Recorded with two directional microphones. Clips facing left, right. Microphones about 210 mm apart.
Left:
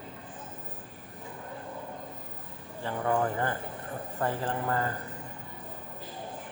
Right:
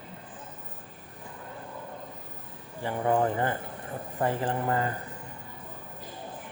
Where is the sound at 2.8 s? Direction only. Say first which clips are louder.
Right 3 dB; 15° right (ahead or behind).